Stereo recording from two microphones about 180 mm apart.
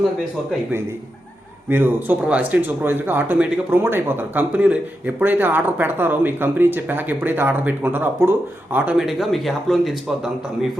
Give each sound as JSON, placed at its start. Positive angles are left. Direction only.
{"t": 1.7, "sound": "speech", "side_deg": -10}